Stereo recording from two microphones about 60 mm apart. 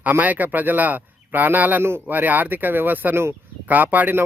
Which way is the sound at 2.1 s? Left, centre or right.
Right.